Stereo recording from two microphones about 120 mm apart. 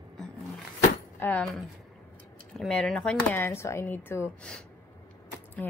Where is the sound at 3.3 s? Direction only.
20° left (ahead or behind).